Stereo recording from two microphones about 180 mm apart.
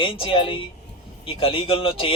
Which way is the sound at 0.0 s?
30° left (ahead or behind).